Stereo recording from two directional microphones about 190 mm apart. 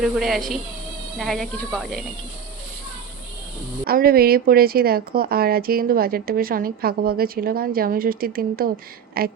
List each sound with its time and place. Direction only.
0.0 s speech: centre (ahead or behind)
3.8 s a woman's voice: 50° right (ahead or behind)